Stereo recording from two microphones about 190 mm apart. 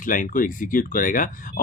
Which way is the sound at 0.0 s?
45° left (ahead or behind).